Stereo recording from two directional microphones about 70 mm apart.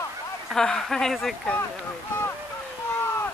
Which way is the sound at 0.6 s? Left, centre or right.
Centre.